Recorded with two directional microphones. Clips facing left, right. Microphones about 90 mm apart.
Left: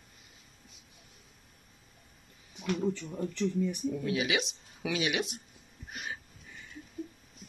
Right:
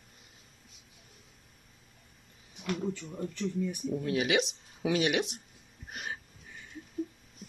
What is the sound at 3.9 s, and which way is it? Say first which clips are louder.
Speech: right 2 dB; 40° right (ahead or behind).